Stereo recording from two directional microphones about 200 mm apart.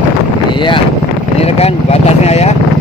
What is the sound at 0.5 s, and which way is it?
Wind noise, 25° left (ahead or behind).